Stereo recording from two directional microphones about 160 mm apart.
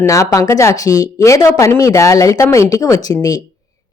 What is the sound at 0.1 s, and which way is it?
Speech, 20° left (ahead or behind).